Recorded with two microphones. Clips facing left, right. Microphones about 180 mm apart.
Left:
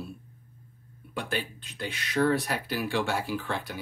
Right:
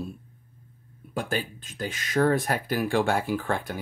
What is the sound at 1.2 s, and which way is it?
Speech, 45° right (ahead or behind).